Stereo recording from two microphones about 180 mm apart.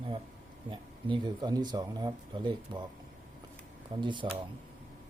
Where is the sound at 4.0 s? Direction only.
25° right (ahead or behind).